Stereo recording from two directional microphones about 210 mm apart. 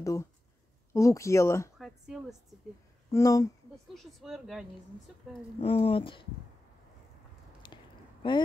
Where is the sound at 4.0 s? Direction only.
Centre (ahead or behind).